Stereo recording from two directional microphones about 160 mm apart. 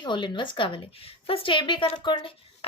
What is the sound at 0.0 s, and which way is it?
Speech, 30° left (ahead or behind).